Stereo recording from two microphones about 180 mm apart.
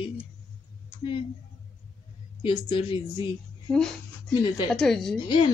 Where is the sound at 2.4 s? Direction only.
30° left (ahead or behind).